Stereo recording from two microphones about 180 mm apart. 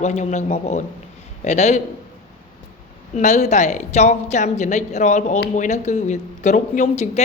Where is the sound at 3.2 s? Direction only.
40° left (ahead or behind).